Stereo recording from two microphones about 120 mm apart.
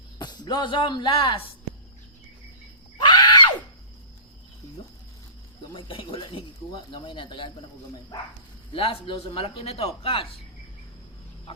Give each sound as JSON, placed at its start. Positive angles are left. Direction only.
{"t": 0.2, "sound": "speech", "side_deg": 35}
{"t": 3.0, "sound": "screaming", "side_deg": 40}
{"t": 5.7, "sound": "speech", "side_deg": 45}
{"t": 8.7, "sound": "speech", "side_deg": 50}
{"t": 11.5, "sound": "a sound", "side_deg": 50}